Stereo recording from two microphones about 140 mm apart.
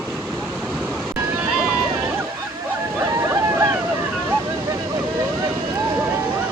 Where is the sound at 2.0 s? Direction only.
15° right (ahead or behind).